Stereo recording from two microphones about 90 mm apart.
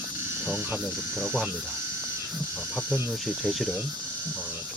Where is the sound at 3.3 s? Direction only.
Centre (ahead or behind).